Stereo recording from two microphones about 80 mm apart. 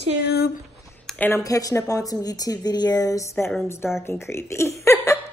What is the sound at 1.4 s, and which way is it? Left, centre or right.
Speech, left.